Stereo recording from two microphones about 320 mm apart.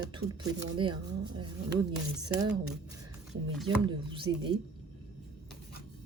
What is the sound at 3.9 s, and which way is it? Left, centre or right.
Speech, centre.